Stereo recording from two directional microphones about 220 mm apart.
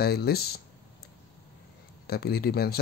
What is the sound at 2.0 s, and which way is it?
Speech, 45° left (ahead or behind).